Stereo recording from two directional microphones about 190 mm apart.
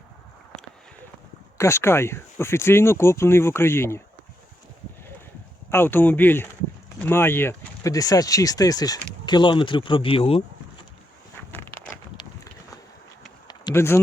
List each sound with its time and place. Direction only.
1.5 s speech: 15° left (ahead or behind)
5.7 s speech: 10° left (ahead or behind); by 10.4 s 30° left (ahead or behind)
11.5 s walk: 10° left (ahead or behind)
13.5 s a sound: 15° left (ahead or behind)